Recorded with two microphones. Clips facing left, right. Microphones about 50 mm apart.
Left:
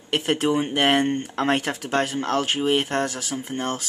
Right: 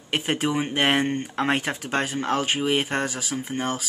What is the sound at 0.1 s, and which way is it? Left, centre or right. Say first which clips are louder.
Speech: left 3 dB; centre.